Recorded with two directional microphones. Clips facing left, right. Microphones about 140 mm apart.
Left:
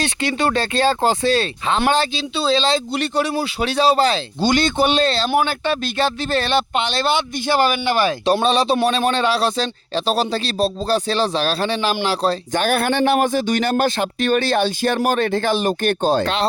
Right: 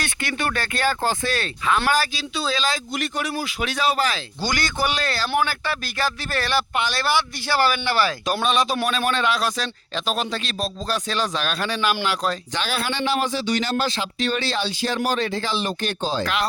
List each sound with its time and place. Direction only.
0.0 s speech: 20° left (ahead or behind)
8.2 s speech: 30° left (ahead or behind)
12.5 s a man's voice: 55° left (ahead or behind)
16.2 s speech: 30° left (ahead or behind)